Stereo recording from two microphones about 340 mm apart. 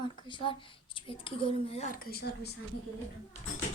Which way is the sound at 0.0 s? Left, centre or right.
Centre.